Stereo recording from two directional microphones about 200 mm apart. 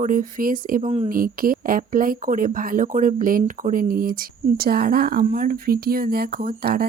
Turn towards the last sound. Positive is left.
turn(degrees=-50)  # may be behind; listen again after turning